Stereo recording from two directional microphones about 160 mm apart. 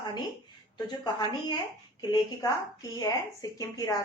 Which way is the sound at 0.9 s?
25° left (ahead or behind).